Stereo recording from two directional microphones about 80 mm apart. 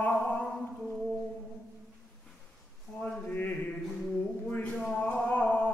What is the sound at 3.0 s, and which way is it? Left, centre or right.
Speech, centre.